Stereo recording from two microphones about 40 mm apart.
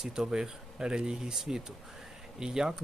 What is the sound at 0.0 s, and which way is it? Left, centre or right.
Speech, centre.